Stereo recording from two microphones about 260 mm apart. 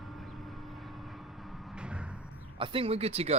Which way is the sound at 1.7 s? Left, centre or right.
Centre.